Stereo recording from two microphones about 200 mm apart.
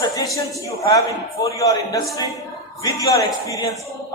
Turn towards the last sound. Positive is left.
turn(degrees=15)  # may be behind; listen again after turning